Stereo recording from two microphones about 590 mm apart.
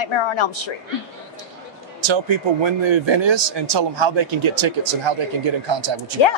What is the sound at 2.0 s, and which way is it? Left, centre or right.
A man's voice, right.